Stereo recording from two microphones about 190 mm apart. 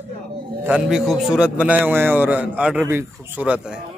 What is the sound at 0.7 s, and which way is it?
A man's voice, 5° right (ahead or behind).